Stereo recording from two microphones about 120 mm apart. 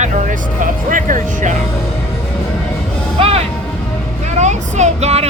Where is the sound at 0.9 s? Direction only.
90° right.